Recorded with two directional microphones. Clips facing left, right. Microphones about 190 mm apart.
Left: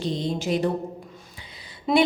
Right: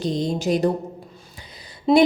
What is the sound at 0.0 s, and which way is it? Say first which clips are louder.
Speech: right 4 dB; 40° right (ahead or behind).